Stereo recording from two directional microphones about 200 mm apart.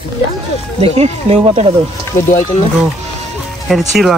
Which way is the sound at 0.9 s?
35° right (ahead or behind).